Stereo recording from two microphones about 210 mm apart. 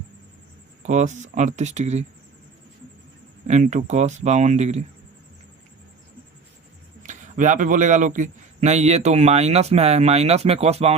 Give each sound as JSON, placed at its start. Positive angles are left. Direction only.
{"t": 0.8, "sound": "a man's voice", "side_deg": -35}
{"t": 3.4, "sound": "a man's voice", "side_deg": -35}
{"t": 7.0, "sound": "a man's voice", "side_deg": -35}